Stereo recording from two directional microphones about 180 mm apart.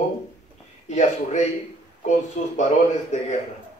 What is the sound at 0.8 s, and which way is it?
Speech, 40° left (ahead or behind).